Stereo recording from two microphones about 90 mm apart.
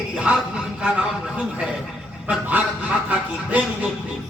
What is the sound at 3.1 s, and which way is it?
Speech, 15° right (ahead or behind).